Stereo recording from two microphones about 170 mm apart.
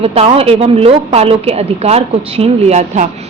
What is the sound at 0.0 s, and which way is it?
A woman's voice, 40° right (ahead or behind).